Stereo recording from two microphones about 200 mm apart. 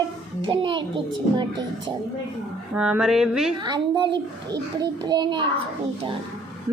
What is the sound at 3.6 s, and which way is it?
A child's voice, 20° right (ahead or behind).